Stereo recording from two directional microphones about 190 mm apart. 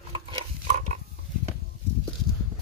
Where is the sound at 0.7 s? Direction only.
40° right (ahead or behind).